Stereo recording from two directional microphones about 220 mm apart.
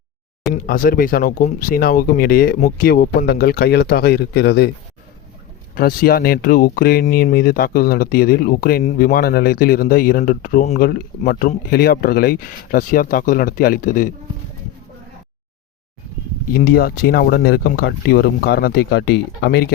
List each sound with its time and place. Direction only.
0.5 s speech: 40° left (ahead or behind)
5.7 s speech: 45° left (ahead or behind)
16.5 s speech: 40° left (ahead or behind)